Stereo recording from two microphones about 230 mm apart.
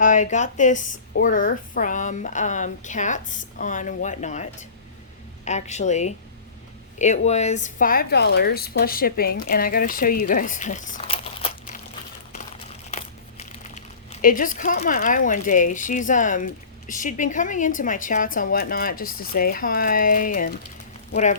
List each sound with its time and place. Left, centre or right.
0.0 s speech: left
5.5 s speech: left
7.3 s speech: left
12.9 s speech: left